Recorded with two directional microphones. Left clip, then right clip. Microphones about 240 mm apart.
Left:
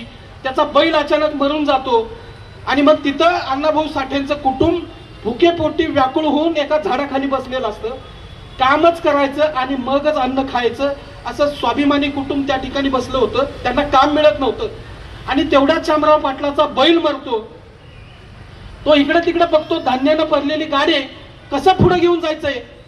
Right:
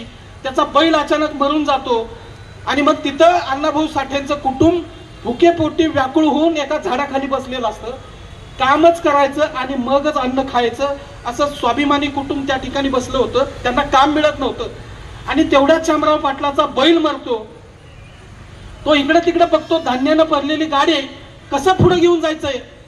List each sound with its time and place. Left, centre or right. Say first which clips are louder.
0.4 s speech: even; centre
18.9 s speech: even; centre